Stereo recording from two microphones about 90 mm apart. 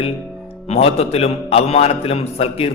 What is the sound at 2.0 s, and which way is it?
Speech, 90° left.